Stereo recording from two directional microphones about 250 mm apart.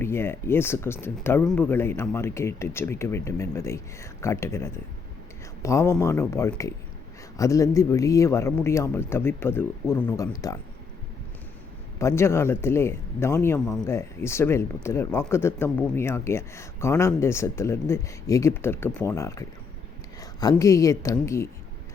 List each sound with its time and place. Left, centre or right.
0.0 s speech: centre
11.9 s speech: centre